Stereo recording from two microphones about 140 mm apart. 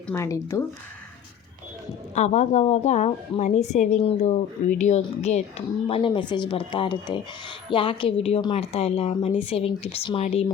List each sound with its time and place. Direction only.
0.1 s speech: 20° left (ahead or behind)
2.1 s a woman's voice: 55° left (ahead or behind)